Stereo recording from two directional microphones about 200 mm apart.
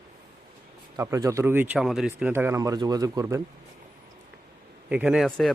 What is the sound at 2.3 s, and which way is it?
Speech, 10° right (ahead or behind).